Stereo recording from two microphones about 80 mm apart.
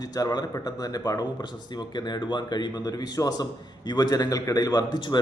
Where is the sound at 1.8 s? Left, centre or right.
Left.